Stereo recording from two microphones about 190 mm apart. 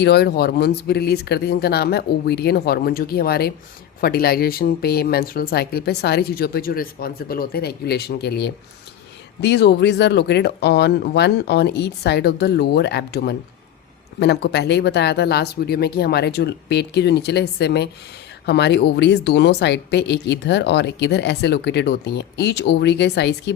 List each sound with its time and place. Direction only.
0.0 s speech: 60° left (ahead or behind)